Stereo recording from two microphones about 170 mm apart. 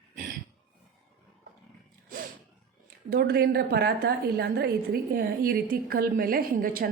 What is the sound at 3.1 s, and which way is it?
A woman's voice, 65° right (ahead or behind).